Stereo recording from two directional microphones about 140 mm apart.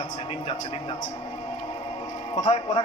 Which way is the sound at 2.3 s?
35° left (ahead or behind).